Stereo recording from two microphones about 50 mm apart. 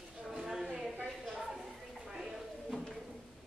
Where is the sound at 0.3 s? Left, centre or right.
Centre.